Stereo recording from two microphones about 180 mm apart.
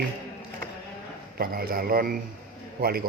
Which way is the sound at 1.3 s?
55° right (ahead or behind).